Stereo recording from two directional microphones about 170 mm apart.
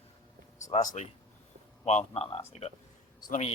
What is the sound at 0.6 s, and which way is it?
Speech, 45° left (ahead or behind).